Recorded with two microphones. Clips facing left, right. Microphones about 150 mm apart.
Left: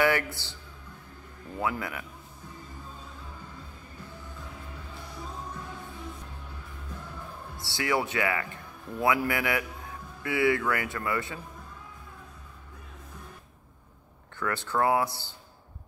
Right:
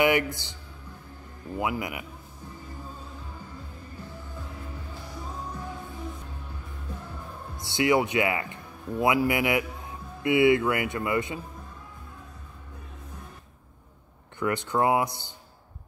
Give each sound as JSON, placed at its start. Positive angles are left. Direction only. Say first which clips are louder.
{"t": 0.0, "sound": "speech", "louder": "right 3 dB", "side_deg": -15}
{"t": 1.6, "sound": "speech", "louder": "right 2 dB", "side_deg": -15}
{"t": 7.5, "sound": "speech", "louder": "right 6 dB", "side_deg": -20}
{"t": 14.4, "sound": "speech", "louder": "right 2 dB", "side_deg": -15}